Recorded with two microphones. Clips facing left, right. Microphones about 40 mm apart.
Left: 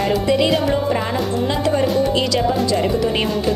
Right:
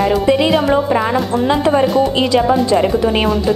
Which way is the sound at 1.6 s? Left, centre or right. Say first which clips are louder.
Right 3 dB; right.